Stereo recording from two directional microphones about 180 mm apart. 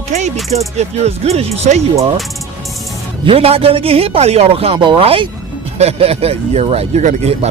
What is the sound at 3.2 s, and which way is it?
Speech, 30° right (ahead or behind).